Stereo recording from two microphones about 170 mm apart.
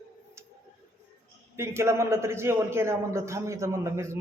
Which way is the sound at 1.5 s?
15° right (ahead or behind).